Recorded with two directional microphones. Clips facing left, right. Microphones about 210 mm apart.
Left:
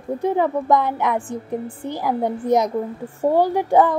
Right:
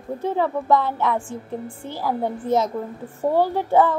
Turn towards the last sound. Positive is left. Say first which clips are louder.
# left 2 dB
turn(degrees=15)  # may be behind; listen again after turning